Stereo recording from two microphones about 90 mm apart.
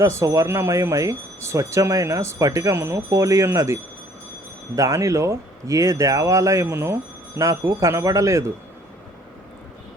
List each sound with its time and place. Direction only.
0.0 s speech: 35° right (ahead or behind)